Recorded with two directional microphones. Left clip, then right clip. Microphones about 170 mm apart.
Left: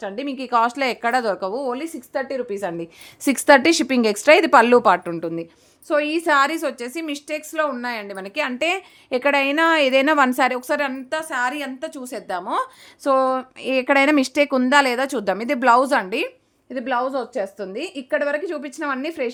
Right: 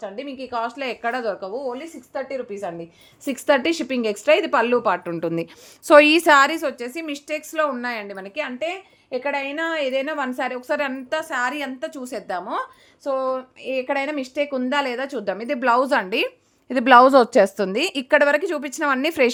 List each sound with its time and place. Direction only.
0.0 s speech: 50° left (ahead or behind)
3.2 s speech: 30° left (ahead or behind)
5.2 s speech: 20° right (ahead or behind)
5.9 s a woman's voice: 45° right (ahead or behind)
6.2 s a woman's voice: 10° right (ahead or behind); by 8.3 s 15° left (ahead or behind)
8.5 s speech: 55° left (ahead or behind); by 10.7 s 35° left (ahead or behind)
10.7 s a woman's voice: 10° left (ahead or behind)
13.0 s speech: 50° left (ahead or behind); by 16.3 s centre (ahead or behind)
16.8 s a woman's voice: 50° right (ahead or behind)
17.1 s a woman's voice: 70° right (ahead or behind)
17.6 s a woman's voice: 30° right (ahead or behind); by 19.1 s 15° right (ahead or behind)